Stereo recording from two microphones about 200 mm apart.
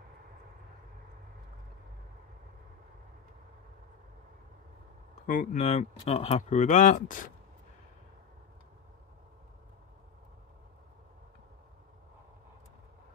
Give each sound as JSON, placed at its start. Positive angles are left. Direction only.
{"t": 5.2, "sound": "speech", "side_deg": 40}